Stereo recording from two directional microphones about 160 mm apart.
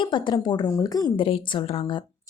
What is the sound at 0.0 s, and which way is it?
A woman's voice, 30° left (ahead or behind).